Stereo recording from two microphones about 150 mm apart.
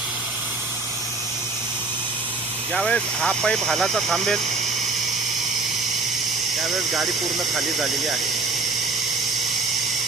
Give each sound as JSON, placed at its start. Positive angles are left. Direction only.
{"t": 2.7, "sound": "speech", "side_deg": 5}